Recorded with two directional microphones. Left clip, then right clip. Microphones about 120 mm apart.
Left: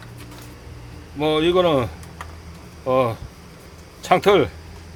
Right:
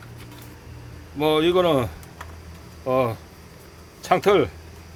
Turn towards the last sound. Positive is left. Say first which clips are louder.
# left 3 dB
turn(degrees=-5)  # may be behind; listen again after turning